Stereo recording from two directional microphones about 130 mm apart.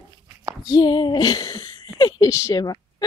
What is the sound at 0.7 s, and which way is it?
Speech, 35° left (ahead or behind).